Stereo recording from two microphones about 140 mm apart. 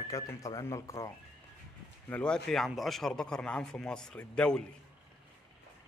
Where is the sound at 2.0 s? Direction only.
10° left (ahead or behind).